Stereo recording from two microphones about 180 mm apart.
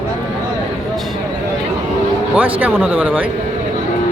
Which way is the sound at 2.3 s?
10° right (ahead or behind).